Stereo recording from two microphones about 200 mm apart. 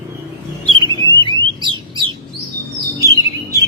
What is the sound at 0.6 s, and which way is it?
Bird, 25° right (ahead or behind).